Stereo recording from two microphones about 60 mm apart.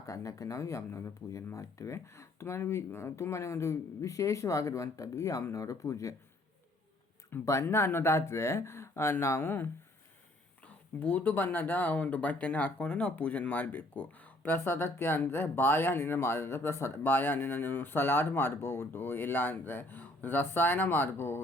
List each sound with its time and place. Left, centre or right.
0.0 s speech: left
7.4 s speech: left
11.0 s speech: left
14.5 s speech: left
17.0 s speech: left